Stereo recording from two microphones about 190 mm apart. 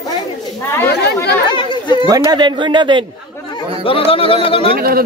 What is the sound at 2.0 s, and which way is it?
Speech, 20° right (ahead or behind).